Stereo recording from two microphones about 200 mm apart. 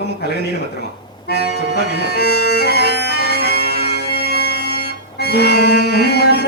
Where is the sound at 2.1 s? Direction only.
55° left (ahead or behind).